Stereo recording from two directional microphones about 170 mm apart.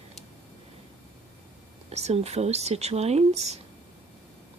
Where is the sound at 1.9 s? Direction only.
40° right (ahead or behind).